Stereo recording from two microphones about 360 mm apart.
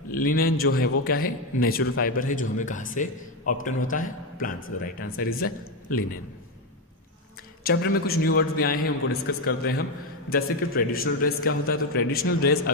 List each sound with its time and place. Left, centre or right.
0.1 s a man's voice: left
7.6 s a man's voice: left